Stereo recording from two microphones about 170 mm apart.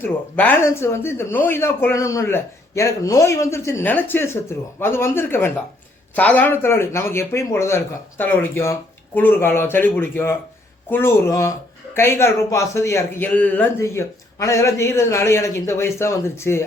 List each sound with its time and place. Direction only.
0.0 s a man's voice: 10° left (ahead or behind)